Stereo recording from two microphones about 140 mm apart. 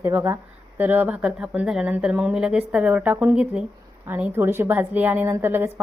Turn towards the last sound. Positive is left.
turn(degrees=-15)  # may be behind; listen again after turning